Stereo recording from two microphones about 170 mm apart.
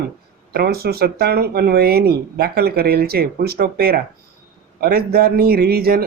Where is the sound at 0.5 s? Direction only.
65° right (ahead or behind).